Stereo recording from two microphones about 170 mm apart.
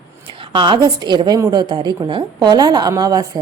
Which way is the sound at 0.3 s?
30° right (ahead or behind).